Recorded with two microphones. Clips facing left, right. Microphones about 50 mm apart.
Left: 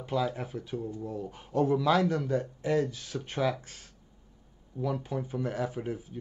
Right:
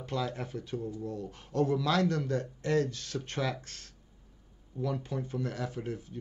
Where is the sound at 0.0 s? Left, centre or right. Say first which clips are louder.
Left 4 dB; centre.